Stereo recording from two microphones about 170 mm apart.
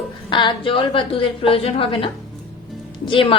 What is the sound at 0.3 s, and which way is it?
A woman's voice, 25° left (ahead or behind).